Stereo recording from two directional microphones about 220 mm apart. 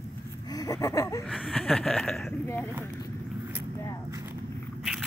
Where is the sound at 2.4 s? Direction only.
10° left (ahead or behind).